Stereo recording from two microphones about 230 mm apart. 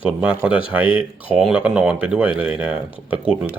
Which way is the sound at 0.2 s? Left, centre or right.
Centre.